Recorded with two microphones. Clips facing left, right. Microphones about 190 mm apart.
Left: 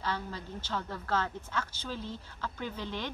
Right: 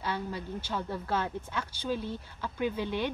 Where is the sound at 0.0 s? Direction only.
10° right (ahead or behind).